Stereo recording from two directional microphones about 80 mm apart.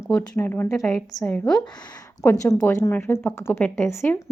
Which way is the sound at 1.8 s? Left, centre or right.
Left.